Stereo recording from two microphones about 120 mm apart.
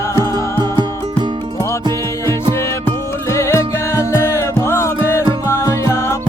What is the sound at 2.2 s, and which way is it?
Music, 20° left (ahead or behind).